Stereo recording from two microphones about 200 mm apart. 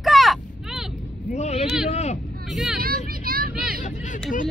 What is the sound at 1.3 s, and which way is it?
Speech, 35° left (ahead or behind).